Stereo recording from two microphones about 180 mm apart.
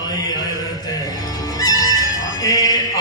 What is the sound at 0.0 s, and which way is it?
Music, 20° left (ahead or behind).